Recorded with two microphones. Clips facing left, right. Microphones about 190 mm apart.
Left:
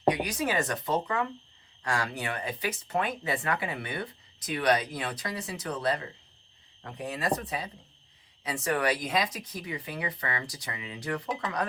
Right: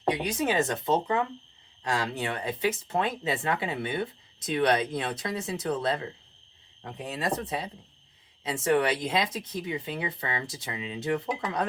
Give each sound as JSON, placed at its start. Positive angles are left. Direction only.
{"t": 0.1, "sound": "speech", "side_deg": -25}